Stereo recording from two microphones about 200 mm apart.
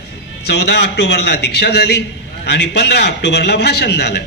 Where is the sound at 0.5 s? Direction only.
55° left (ahead or behind).